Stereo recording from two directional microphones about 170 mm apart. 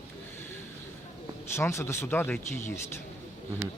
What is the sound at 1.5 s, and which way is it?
Speech, 15° left (ahead or behind).